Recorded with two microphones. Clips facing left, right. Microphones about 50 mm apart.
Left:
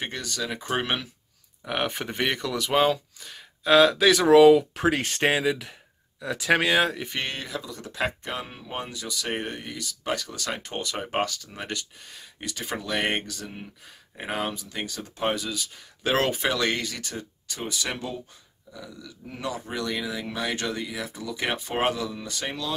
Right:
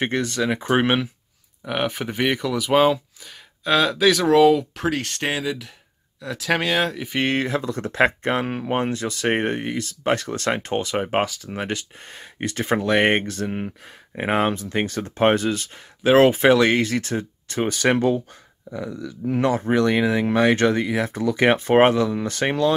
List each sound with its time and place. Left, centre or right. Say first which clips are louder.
0.0 s speech: right 9 dB; right
1.6 s speech: right 4 dB; centre
7.2 s speech: right 10 dB; right
8.4 s speech: right 11 dB; right
12.1 s speech: right 12 dB; right
16.0 s speech: right 10 dB; centre
16.3 s speech: right 10 dB; right
17.6 s speech: right 11 dB; right
17.9 s speech: right 14 dB; right
19.2 s speech: right 12 dB; right
21.1 s speech: right 12 dB; right